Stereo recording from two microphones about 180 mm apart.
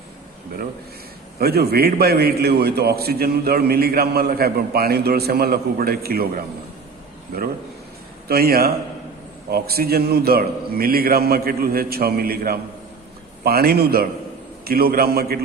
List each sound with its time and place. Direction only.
1.4 s a man's voice: 60° right (ahead or behind)
8.3 s a man's voice: 60° right (ahead or behind)